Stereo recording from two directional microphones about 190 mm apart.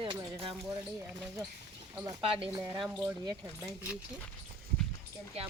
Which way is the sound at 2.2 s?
30° right (ahead or behind).